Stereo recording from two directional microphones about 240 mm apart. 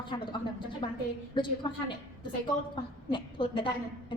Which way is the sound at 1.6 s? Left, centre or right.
Centre.